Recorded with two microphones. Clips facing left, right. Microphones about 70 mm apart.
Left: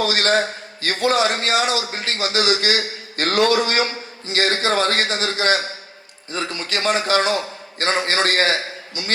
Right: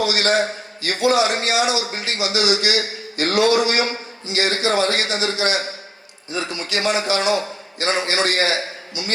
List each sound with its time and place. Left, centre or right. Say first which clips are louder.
0.0 s a man's voice: even; left